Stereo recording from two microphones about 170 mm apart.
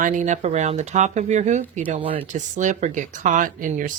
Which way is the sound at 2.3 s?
45° right (ahead or behind).